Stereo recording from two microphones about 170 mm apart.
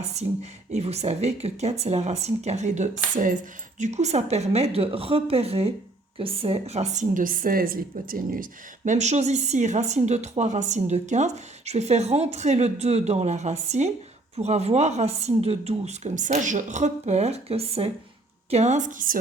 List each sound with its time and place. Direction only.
0.0 s a woman's voice: 40° right (ahead or behind)